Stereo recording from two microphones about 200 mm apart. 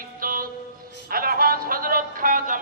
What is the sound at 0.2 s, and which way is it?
Music, 45° right (ahead or behind).